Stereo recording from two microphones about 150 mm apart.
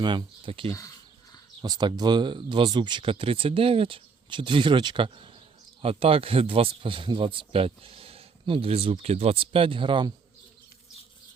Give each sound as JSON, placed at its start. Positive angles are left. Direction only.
{"t": 0.0, "sound": "speech", "side_deg": -30}
{"t": 0.7, "sound": "bird", "side_deg": 20}
{"t": 1.6, "sound": "speech", "side_deg": -30}